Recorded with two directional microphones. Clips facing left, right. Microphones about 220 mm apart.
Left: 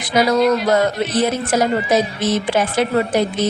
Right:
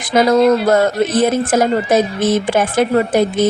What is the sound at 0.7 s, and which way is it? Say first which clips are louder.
Speech: right 3 dB; 50° right (ahead or behind).